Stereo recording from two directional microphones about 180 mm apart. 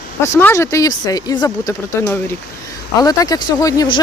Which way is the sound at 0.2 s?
15° left (ahead or behind).